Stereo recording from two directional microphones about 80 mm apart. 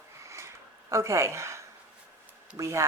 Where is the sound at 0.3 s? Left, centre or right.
Right.